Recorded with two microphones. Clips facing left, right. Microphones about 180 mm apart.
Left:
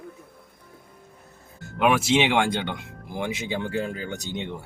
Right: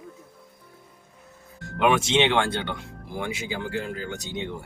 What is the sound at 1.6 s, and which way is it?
Speech, 5° left (ahead or behind).